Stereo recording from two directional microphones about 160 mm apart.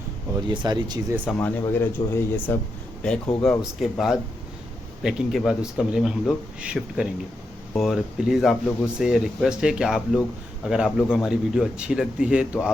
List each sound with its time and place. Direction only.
0.4 s speech: 30° right (ahead or behind)
1.2 s speech: 10° left (ahead or behind)